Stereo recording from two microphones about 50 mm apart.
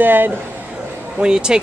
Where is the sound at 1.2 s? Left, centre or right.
Centre.